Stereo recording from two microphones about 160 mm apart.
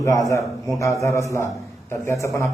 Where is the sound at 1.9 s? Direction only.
20° left (ahead or behind).